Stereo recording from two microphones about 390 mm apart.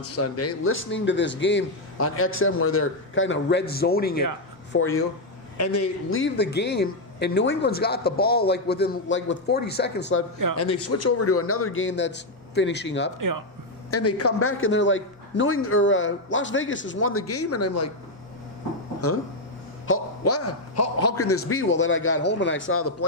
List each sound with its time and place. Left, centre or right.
0.0 s a man's voice: left
10.6 s a man's voice: left
13.1 s a man's voice: right
13.9 s a man's voice: left
19.9 s a man's voice: left